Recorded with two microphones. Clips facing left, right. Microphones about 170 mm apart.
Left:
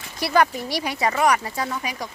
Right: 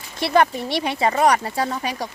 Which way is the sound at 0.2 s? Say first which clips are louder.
Right 2 dB; 25° right (ahead or behind).